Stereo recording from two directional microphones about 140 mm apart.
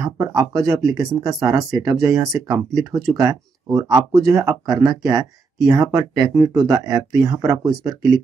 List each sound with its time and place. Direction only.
0.0 s speech: 25° right (ahead or behind)